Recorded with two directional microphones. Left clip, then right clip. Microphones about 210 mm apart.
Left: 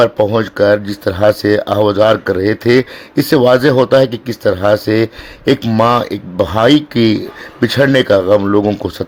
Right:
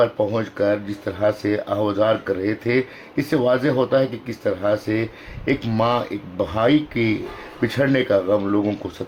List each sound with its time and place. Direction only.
0.0 s speech: 45° left (ahead or behind)